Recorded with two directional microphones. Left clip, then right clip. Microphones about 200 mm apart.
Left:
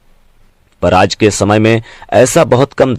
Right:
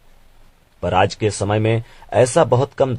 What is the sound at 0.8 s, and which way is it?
Speech, 40° left (ahead or behind).